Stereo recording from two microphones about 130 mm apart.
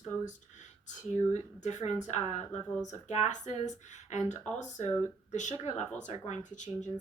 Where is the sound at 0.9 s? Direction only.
65° left (ahead or behind).